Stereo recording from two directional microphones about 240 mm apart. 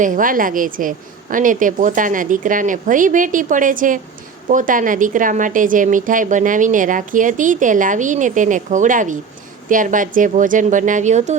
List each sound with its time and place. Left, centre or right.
0.0 s a woman's voice: right